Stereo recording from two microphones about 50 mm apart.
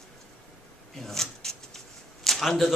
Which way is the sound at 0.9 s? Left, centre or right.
Centre.